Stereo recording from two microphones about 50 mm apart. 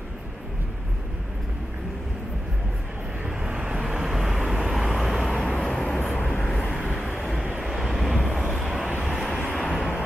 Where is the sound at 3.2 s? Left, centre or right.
Centre.